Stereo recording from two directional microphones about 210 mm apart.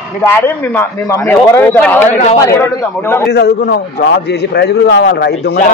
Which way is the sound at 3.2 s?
50° left (ahead or behind).